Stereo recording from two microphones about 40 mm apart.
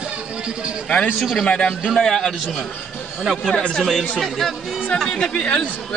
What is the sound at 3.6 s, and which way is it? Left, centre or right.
Speech, left.